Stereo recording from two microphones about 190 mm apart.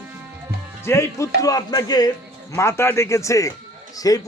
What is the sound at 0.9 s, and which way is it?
A man's voice, 15° left (ahead or behind).